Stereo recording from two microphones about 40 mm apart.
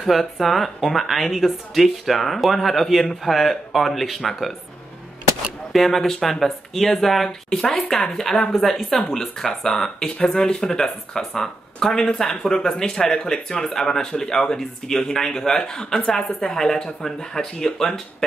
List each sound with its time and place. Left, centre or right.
0.0 s speech: centre
5.7 s speech: centre